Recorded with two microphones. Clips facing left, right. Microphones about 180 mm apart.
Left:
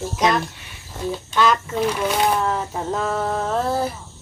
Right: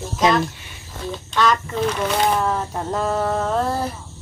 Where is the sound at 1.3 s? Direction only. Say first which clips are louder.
Even; 5° left (ahead or behind).